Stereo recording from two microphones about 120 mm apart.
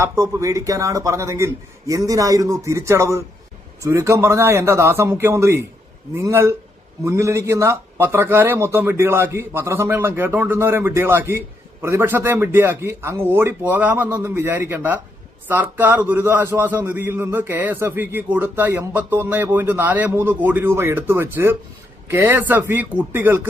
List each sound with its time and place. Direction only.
0.0 s a man's voice: 25° right (ahead or behind)